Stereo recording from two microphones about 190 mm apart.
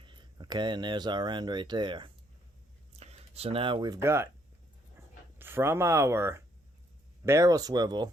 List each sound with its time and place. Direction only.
0.0 s speech: 25° right (ahead or behind)
5.0 s a sound: 15° right (ahead or behind)
5.4 s speech: 10° right (ahead or behind)